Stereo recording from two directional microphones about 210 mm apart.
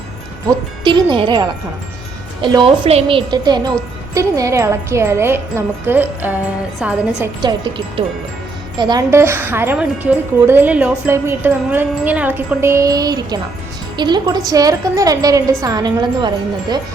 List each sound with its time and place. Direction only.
0.9 s a woman's voice: 25° right (ahead or behind); by 7.3 s 5° right (ahead or behind)
7.4 s speech: 25° right (ahead or behind)